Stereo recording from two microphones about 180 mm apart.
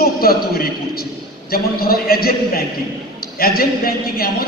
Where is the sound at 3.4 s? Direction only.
55° left (ahead or behind).